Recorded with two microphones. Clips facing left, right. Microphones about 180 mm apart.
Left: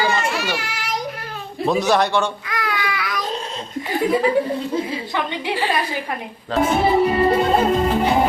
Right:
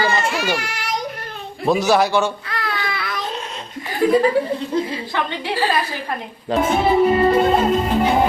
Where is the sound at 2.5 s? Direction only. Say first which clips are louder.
Left 1 dB; 15° left (ahead or behind).